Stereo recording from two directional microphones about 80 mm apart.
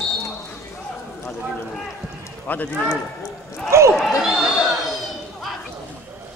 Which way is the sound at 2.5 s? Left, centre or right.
Left.